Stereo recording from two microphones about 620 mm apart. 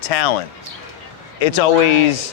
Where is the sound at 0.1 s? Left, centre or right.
Left.